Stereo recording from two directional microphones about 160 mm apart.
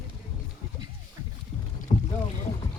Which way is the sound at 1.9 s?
35° left (ahead or behind).